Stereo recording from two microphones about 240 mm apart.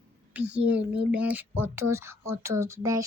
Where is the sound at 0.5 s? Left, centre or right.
Centre.